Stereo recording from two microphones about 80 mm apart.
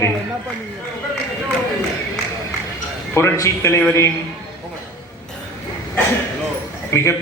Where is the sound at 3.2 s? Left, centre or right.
Left.